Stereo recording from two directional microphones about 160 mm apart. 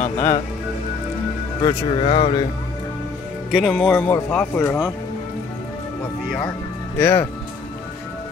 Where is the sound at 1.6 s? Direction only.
30° left (ahead or behind).